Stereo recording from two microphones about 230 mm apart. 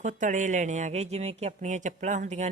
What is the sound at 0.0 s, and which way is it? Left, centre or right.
Speech, right.